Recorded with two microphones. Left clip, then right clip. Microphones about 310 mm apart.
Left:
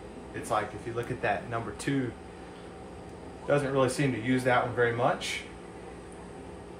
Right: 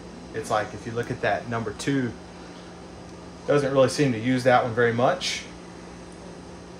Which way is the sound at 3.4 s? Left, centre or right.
Right.